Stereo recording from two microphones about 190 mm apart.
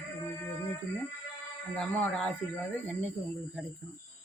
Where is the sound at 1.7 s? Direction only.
5° left (ahead or behind).